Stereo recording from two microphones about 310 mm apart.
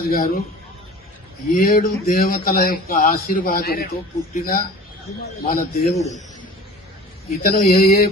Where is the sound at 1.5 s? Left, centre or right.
Left.